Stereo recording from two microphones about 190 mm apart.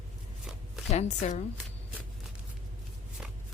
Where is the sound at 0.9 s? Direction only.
35° left (ahead or behind).